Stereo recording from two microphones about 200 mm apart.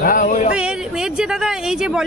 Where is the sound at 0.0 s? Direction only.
40° left (ahead or behind).